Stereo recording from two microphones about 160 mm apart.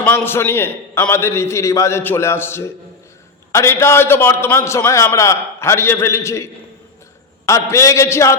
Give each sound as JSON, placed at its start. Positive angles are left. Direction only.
{"t": 0.0, "sound": "a man's voice", "side_deg": 15}